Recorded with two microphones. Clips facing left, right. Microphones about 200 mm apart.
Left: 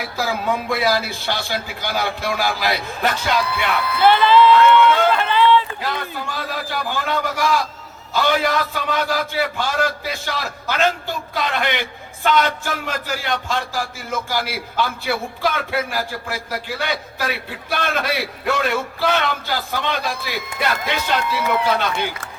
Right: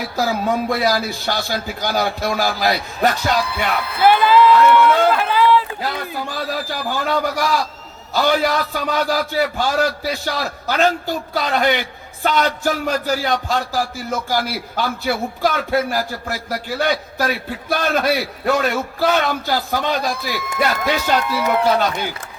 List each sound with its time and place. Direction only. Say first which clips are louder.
0.2 s a man's voice: right 3 dB; 40° right (ahead or behind)
4.0 s speech: right 1 dB; 10° right (ahead or behind)
4.5 s speech: right 1 dB; 45° right (ahead or behind)
5.1 s run: even; 5° right (ahead or behind)
5.8 s a man's voice: right 1 dB; 40° right (ahead or behind)